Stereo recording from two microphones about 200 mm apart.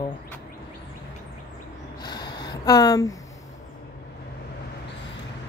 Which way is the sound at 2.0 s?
20° left (ahead or behind).